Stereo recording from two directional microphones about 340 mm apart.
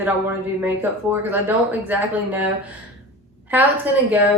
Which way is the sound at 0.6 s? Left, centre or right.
Centre.